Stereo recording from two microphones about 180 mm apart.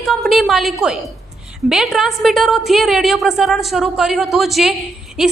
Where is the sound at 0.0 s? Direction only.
Centre (ahead or behind).